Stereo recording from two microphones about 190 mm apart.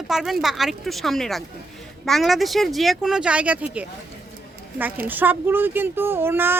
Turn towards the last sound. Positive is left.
turn(degrees=-10)  # may be behind; listen again after turning